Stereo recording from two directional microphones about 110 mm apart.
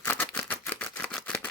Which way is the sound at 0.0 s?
20° left (ahead or behind).